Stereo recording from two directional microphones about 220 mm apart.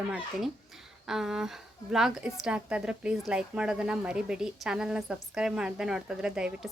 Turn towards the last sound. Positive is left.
turn(degrees=-5)  # may be behind; listen again after turning